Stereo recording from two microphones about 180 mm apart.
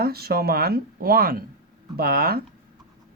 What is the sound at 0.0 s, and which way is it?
Speech, 60° right (ahead or behind).